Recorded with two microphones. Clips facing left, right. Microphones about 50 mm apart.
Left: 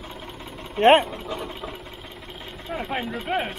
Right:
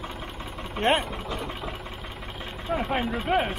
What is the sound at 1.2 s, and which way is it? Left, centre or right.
Speech, centre.